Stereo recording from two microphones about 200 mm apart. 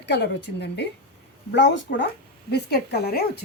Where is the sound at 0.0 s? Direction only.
60° left (ahead or behind).